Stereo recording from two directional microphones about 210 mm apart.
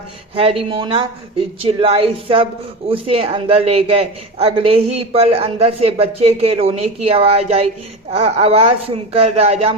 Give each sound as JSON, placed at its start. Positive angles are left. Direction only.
{"t": 0.3, "sound": "speech", "side_deg": -25}